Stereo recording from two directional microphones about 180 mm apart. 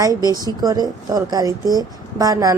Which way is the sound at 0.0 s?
20° right (ahead or behind).